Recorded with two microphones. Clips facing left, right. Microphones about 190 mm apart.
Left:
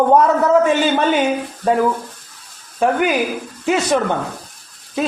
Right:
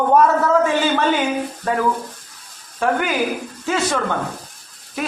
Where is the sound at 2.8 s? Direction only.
20° left (ahead or behind).